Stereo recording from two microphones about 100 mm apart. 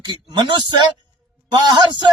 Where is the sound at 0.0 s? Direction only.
50° right (ahead or behind).